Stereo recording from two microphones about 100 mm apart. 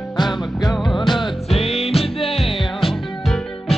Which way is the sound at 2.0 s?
75° left (ahead or behind).